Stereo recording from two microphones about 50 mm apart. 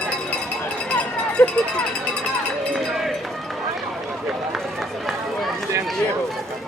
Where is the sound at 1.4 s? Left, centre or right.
Left.